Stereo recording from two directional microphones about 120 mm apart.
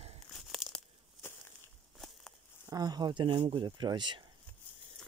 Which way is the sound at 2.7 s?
35° right (ahead or behind).